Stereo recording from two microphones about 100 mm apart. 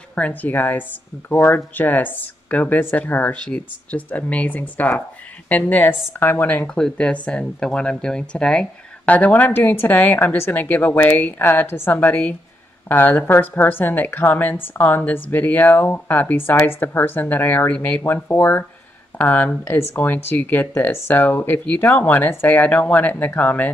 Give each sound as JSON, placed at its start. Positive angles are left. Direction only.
{"t": 0.1, "sound": "a woman's voice", "side_deg": 15}